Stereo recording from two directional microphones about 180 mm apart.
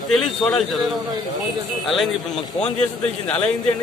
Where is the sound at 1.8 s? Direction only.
Centre (ahead or behind).